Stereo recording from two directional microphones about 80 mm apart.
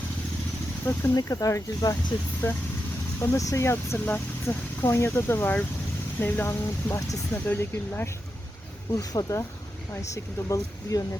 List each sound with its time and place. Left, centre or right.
1.1 s speech: left
2.4 s speech: left
6.5 s speech: left
9.0 s speech: left